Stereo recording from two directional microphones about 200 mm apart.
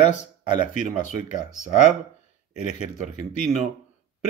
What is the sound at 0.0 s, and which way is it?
Speech, 35° left (ahead or behind).